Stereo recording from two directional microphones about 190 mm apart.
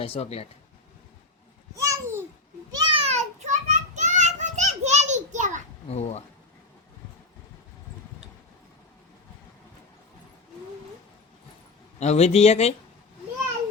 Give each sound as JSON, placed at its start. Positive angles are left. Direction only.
{"t": 0.0, "sound": "speech", "side_deg": 30}
{"t": 1.8, "sound": "babbling", "side_deg": -15}
{"t": 2.7, "sound": "child singing", "side_deg": -30}
{"t": 5.9, "sound": "speech", "side_deg": 35}
{"t": 11.9, "sound": "speech", "side_deg": 35}